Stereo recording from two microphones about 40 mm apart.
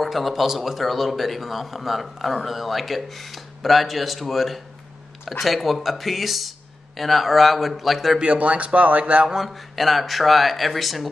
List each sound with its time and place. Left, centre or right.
0.0 s a man's voice: centre
8.2 s speech: right
9.5 s a man's voice: centre